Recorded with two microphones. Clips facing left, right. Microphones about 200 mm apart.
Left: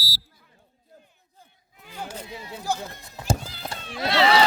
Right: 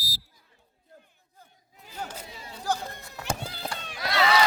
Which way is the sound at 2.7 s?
10° left (ahead or behind).